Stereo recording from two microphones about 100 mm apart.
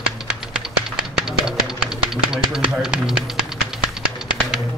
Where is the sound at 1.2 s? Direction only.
5° right (ahead or behind).